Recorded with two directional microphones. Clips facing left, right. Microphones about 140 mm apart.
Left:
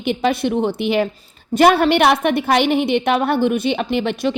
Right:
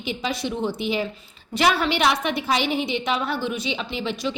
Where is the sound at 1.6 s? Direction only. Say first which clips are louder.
Left 8 dB; 50° left (ahead or behind).